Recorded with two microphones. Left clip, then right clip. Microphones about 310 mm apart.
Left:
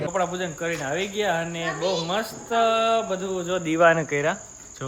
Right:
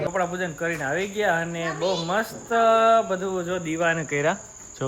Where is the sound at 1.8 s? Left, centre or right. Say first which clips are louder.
Even; centre.